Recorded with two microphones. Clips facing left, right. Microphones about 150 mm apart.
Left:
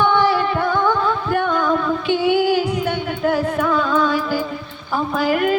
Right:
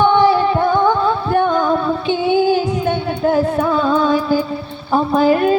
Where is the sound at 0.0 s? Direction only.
25° right (ahead or behind).